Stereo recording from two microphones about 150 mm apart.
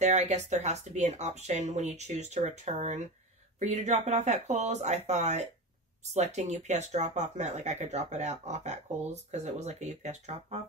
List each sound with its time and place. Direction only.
0.0 s speech: 50° right (ahead or behind)